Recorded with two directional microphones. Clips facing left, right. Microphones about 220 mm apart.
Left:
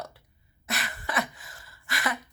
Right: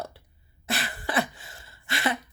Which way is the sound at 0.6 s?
30° right (ahead or behind).